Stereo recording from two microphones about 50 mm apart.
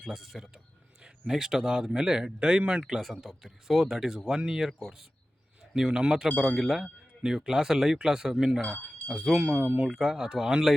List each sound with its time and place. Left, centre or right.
0.1 s speech: centre
5.7 s speech: centre
8.6 s a sound: left
9.0 s speech: centre
9.3 s speech: centre
9.6 s speech: right
9.9 s speech: centre